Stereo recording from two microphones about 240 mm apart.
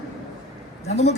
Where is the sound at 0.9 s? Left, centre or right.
Left.